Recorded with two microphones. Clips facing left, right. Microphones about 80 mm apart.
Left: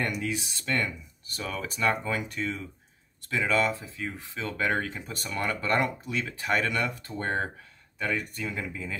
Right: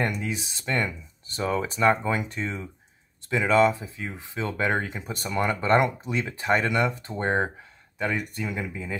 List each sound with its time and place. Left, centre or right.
0.2 s speech: right